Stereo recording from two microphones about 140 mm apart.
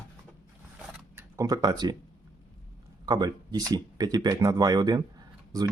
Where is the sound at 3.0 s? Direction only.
30° right (ahead or behind).